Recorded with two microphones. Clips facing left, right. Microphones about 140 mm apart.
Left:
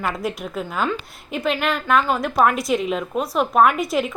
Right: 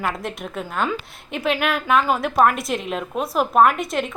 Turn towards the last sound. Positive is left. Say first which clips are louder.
# even
turn(degrees=0)  # may be behind; listen again after turning